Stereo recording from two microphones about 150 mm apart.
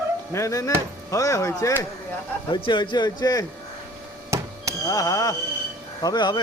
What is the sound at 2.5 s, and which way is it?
Speech, 30° left (ahead or behind).